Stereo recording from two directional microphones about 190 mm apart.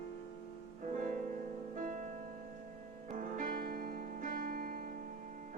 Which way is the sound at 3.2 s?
45° right (ahead or behind).